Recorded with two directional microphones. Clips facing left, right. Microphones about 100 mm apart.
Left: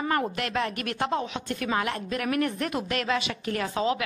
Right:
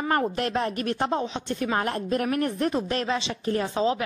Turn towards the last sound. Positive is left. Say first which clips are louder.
# right 2 dB
turn(degrees=-30)  # may be behind; listen again after turning